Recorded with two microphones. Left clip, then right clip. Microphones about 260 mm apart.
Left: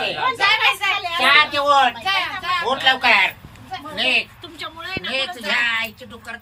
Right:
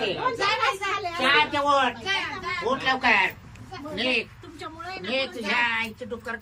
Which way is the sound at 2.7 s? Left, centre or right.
Centre.